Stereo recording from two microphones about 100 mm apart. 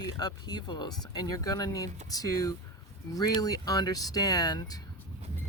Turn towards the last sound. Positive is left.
turn(degrees=40)  # may be behind; listen again after turning